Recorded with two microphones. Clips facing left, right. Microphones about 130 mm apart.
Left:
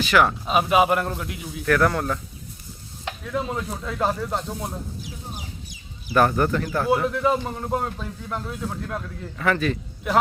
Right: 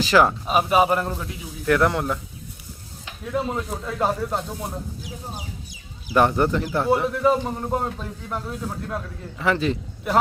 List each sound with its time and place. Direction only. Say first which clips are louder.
0.0 s speech: right 2 dB; 30° right (ahead or behind)
0.4 s a man's voice: even; centre (ahead or behind)
1.6 s speech: right 1 dB; 20° right (ahead or behind)
3.5 s a man's voice: right 1 dB; 5° right (ahead or behind)
6.1 s speech: right 1 dB; 20° right (ahead or behind)
6.9 s a man's voice: right 2 dB; 5° right (ahead or behind)
9.4 s speech: right 1 dB; 25° right (ahead or behind)